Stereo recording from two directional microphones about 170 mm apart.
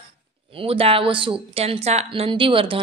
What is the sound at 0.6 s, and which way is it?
Speech, 35° right (ahead or behind).